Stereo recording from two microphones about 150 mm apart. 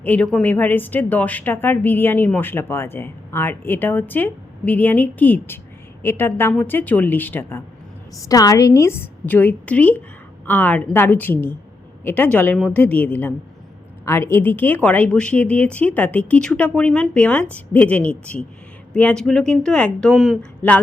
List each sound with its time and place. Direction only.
0.0 s a woman's voice: 10° left (ahead or behind)